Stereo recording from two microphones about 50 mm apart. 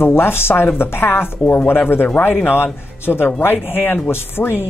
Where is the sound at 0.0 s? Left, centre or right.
Left.